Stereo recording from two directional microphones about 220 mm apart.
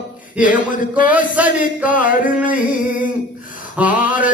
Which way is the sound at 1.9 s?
35° left (ahead or behind).